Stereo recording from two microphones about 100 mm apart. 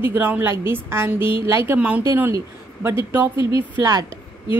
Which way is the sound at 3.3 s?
50° left (ahead or behind).